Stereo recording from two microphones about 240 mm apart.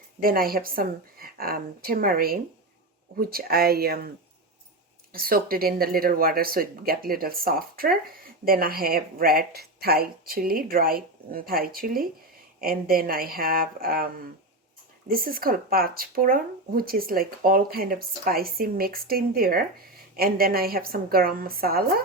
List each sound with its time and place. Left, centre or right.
0.2 s speech: right
5.1 s speech: right
15.1 s speech: right